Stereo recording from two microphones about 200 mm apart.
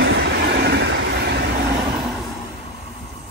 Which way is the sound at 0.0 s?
60° right (ahead or behind).